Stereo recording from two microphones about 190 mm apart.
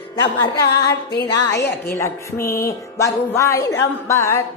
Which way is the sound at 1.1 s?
60° left (ahead or behind).